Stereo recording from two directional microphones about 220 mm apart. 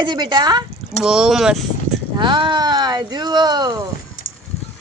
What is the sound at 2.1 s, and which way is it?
Speech, 20° right (ahead or behind).